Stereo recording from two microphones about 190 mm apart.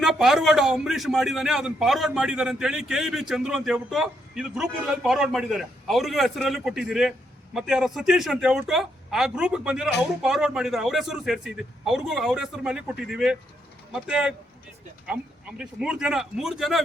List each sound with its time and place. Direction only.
0.0 s a man's voice: centre (ahead or behind)